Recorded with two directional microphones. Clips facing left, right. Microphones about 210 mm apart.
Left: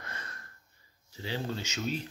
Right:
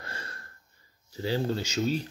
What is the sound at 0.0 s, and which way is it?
Snort, 30° right (ahead or behind).